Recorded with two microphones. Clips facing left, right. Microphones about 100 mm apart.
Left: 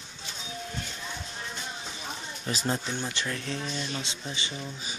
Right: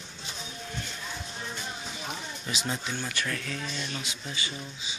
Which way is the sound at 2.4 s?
35° left (ahead or behind).